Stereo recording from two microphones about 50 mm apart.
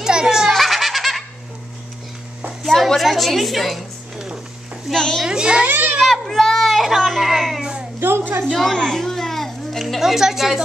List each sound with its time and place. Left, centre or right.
0.0 s baby laughter: centre
0.5 s belly laugh: centre
2.6 s a sound: centre
3.0 s a woman's voice: centre
4.9 s a child's voice: centre
5.2 s a child's voice: centre
5.7 s children playing: right
6.0 s baby cry: centre
8.0 s a sound: right
8.7 s a sound: centre